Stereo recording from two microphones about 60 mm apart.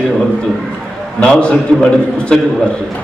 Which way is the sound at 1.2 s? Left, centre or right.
Centre.